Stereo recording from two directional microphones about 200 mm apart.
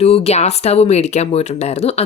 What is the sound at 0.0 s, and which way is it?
Speech, 30° left (ahead or behind).